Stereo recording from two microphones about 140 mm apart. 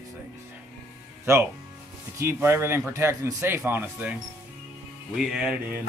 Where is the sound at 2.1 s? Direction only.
20° right (ahead or behind).